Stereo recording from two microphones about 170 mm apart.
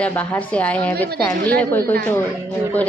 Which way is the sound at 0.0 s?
10° left (ahead or behind).